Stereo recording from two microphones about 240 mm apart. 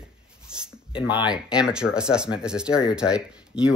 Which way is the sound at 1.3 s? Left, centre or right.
Centre.